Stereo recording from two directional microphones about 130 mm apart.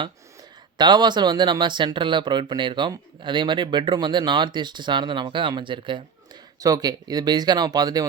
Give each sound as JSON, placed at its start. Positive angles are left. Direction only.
{"t": 0.8, "sound": "speech", "side_deg": -35}